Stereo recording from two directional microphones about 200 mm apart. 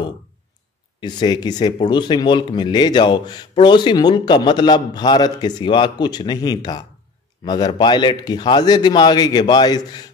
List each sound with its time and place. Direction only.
1.0 s speech: 20° left (ahead or behind)